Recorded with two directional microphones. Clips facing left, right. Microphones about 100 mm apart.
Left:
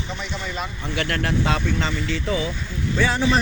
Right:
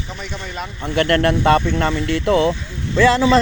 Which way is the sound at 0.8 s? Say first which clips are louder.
Right 10 dB; 55° right (ahead or behind).